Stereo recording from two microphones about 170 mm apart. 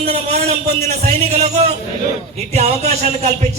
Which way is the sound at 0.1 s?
40° right (ahead or behind).